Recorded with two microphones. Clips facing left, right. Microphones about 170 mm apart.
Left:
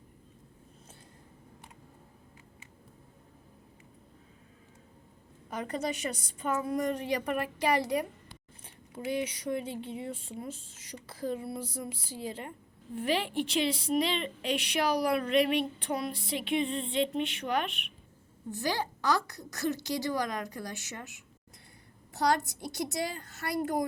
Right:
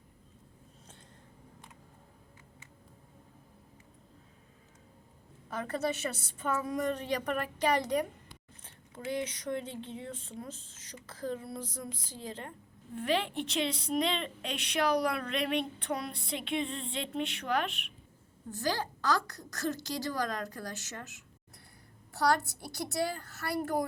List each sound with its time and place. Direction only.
5.5 s a woman's voice: 15° left (ahead or behind); by 17.8 s centre (ahead or behind)
18.5 s a woman's voice: 10° left (ahead or behind)